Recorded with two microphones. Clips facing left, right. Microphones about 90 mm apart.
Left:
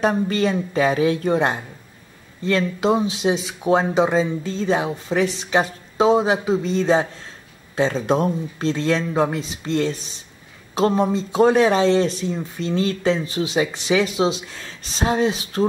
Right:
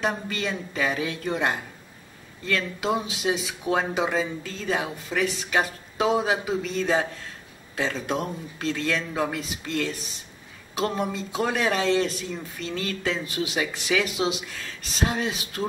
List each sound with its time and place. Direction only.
0.0 s a man's voice: 30° left (ahead or behind)